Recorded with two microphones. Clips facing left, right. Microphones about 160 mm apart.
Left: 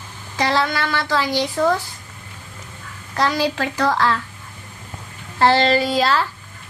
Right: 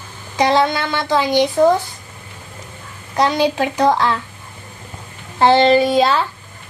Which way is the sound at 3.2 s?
20° right (ahead or behind).